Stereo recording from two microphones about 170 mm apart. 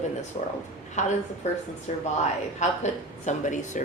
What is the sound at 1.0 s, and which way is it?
Speech, 45° left (ahead or behind).